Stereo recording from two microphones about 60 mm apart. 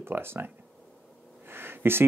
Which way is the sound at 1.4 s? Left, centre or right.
Right.